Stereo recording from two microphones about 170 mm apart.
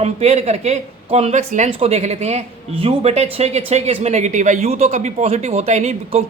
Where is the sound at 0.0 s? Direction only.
40° right (ahead or behind).